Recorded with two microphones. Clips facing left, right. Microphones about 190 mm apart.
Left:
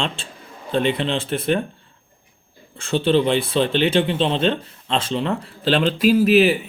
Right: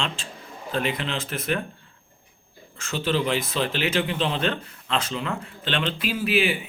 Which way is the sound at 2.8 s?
30° left (ahead or behind).